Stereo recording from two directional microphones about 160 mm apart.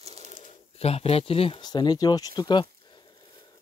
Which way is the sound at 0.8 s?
40° left (ahead or behind).